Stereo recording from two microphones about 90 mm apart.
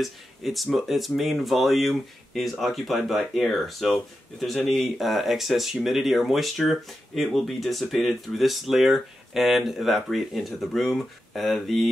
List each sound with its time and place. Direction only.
0.0 s speech: centre (ahead or behind)